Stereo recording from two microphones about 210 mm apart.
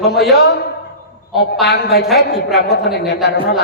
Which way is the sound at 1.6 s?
50° left (ahead or behind).